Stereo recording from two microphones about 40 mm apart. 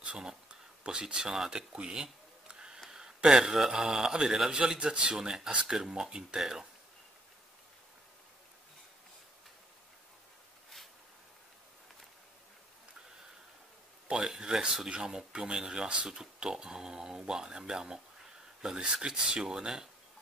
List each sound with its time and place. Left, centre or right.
0.0 s a sound: right
3.3 s speech: centre
5.1 s speech: centre
14.2 s speech: centre